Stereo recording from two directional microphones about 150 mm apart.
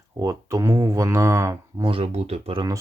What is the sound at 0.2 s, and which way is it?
Speech, 20° right (ahead or behind).